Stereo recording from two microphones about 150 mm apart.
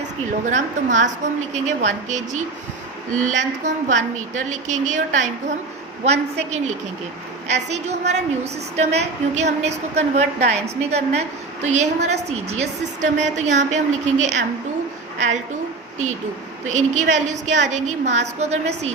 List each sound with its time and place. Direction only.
0.3 s a woman's voice: 55° right (ahead or behind)
16.6 s a woman's voice: 55° right (ahead or behind)